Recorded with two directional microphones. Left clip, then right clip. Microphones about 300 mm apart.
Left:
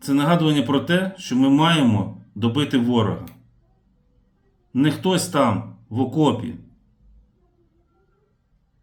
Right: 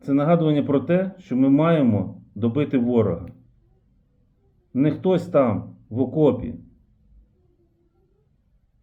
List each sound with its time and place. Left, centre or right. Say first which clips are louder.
0.0 s speech: even; centre
4.7 s speech: even; centre